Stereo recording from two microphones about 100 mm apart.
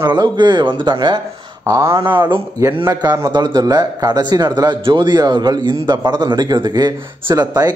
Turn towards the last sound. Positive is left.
turn(degrees=-40)  # may be behind; listen again after turning